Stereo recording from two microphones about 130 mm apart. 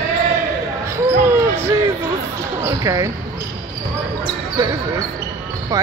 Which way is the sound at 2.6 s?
25° right (ahead or behind).